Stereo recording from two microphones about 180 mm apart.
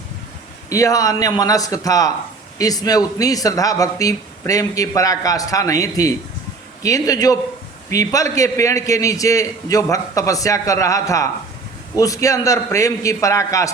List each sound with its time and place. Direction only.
0.7 s a man's voice: 20° left (ahead or behind)